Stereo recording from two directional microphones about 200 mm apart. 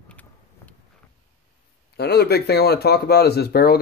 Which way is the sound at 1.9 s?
55° left (ahead or behind).